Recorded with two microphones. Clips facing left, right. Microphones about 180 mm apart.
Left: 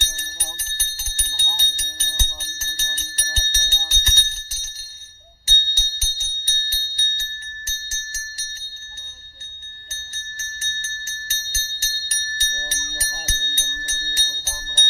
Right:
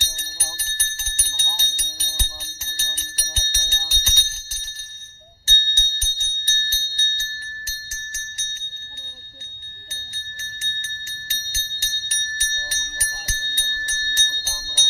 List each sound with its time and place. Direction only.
0.4 s music: centre (ahead or behind)
3.8 s bell: 5° right (ahead or behind); by 7.3 s 10° left (ahead or behind)
7.7 s bell: 25° left (ahead or behind)
9.9 s bell: 45° left (ahead or behind)
11.5 s music: 40° left (ahead or behind); by 14.3 s 15° left (ahead or behind)
14.3 s music: centre (ahead or behind)